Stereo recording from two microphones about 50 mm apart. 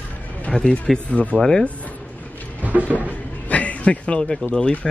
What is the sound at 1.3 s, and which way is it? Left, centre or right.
Speech, right.